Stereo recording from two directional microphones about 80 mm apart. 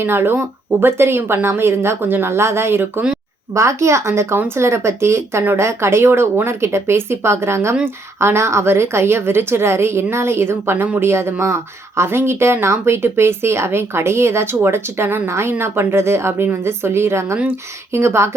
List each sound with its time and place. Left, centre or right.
0.0 s speech: right